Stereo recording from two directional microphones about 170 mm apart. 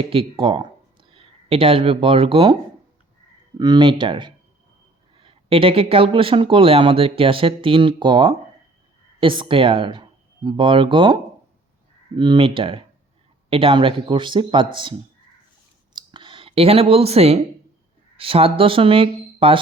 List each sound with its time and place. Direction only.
0.0 s speech: 30° right (ahead or behind)
3.6 s speech: 25° right (ahead or behind)
15.9 s a sound: 30° right (ahead or behind)
18.2 s speech: 35° right (ahead or behind)